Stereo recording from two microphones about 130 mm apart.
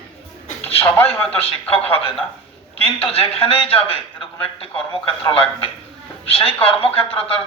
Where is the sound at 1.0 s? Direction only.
45° left (ahead or behind).